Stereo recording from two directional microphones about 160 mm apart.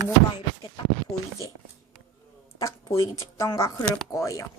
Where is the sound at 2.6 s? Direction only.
20° left (ahead or behind).